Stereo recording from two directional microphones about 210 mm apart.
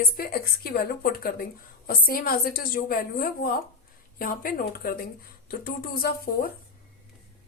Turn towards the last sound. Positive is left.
turn(degrees=45)  # may be behind; listen again after turning